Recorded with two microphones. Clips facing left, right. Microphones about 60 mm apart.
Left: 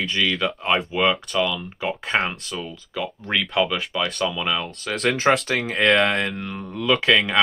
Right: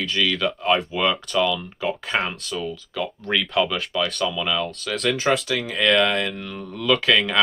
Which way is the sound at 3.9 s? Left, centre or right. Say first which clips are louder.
Even; centre.